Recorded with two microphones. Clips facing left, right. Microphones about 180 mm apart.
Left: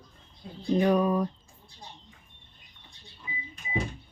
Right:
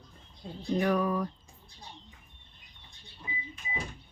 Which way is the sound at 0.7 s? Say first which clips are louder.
Left 4 dB; 20° left (ahead or behind).